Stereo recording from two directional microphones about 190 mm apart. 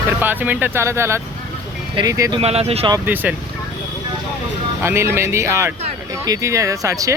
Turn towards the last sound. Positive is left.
turn(degrees=-15)  # may be behind; listen again after turning